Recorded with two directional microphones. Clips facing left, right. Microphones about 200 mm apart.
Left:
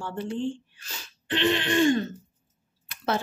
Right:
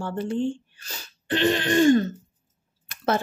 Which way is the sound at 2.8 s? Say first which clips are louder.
Right 3 dB; 45° right (ahead or behind).